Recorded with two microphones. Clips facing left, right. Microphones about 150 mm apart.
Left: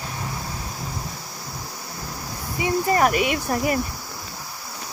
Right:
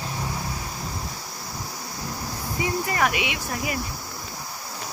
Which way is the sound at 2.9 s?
40° left (ahead or behind).